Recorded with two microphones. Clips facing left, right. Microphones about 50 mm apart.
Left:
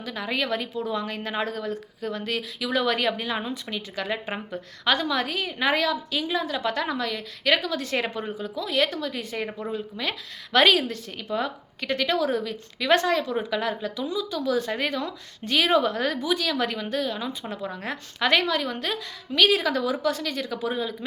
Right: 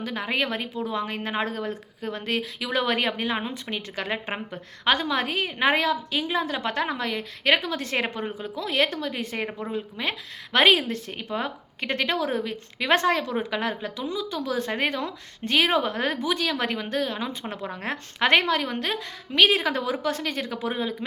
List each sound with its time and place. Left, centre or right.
0.0 s a woman's voice: right
9.5 s a woman's voice: centre
9.7 s a woman's voice: right